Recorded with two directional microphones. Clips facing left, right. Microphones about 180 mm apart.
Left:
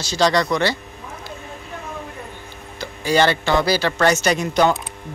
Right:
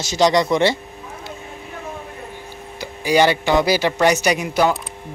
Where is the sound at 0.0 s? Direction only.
20° right (ahead or behind).